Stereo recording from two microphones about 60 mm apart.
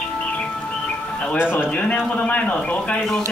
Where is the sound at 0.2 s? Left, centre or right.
Centre.